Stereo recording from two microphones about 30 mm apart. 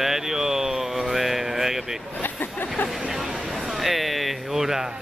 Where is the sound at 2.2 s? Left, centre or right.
Left.